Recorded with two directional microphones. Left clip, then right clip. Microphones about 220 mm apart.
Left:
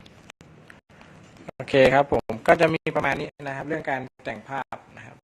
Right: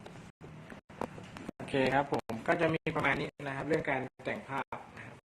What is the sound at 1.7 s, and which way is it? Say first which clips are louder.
Speech: left 12 dB; 45° left (ahead or behind).